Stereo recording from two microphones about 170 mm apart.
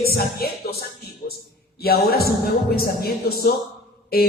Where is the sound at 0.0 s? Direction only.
65° left (ahead or behind).